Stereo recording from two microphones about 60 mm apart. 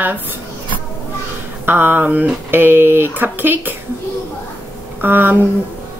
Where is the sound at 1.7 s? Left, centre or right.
Right.